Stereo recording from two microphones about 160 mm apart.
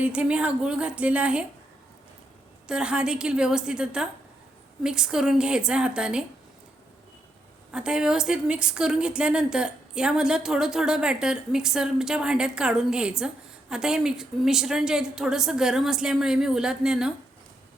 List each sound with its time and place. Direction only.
0.0 s a woman's voice: 5° right (ahead or behind)
2.6 s a woman's voice: 5° right (ahead or behind)
7.7 s a woman's voice: 5° right (ahead or behind)